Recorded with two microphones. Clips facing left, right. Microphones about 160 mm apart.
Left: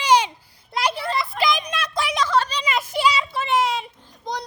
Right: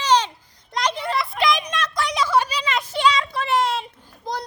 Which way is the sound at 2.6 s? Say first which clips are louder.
Right 1 dB; 10° left (ahead or behind).